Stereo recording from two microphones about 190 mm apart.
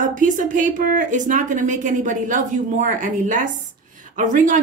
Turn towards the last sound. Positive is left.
turn(degrees=-40)  # may be behind; listen again after turning